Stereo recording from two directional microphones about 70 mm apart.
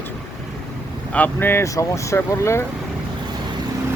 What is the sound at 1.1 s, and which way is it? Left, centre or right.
Speech, left.